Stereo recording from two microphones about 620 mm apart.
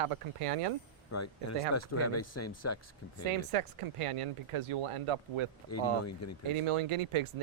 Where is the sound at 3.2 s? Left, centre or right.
Right.